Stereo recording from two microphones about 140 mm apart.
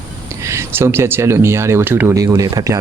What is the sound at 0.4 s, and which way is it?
Speech, 20° right (ahead or behind).